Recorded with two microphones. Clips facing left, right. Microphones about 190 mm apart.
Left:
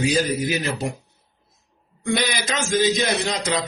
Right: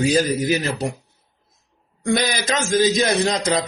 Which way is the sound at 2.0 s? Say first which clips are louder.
Right 3 dB; 45° right (ahead or behind).